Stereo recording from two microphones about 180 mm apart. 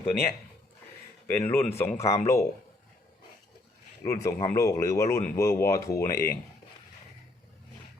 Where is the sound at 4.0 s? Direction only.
15° left (ahead or behind).